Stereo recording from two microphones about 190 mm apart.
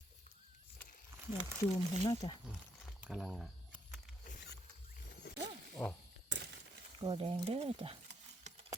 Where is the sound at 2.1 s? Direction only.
20° left (ahead or behind).